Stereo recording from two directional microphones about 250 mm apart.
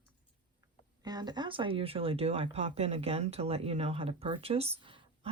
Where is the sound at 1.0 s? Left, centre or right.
Centre.